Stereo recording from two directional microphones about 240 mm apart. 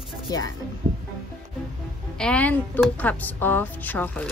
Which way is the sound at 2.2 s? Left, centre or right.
Centre.